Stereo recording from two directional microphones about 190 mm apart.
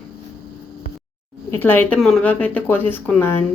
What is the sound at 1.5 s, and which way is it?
Speech, 10° left (ahead or behind).